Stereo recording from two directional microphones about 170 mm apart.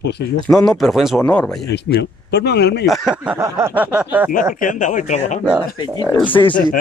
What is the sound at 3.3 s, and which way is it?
Speech, 15° right (ahead or behind).